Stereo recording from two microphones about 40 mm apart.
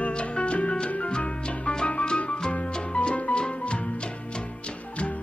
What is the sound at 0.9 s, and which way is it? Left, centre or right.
Organ, left.